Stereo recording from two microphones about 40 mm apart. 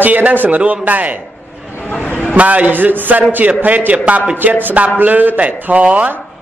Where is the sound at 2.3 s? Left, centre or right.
Right.